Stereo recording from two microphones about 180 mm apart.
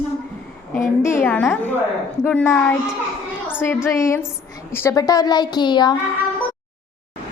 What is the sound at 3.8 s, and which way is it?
A woman's voice, 15° left (ahead or behind).